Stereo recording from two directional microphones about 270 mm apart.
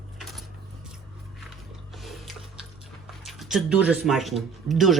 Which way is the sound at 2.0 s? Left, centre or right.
Centre.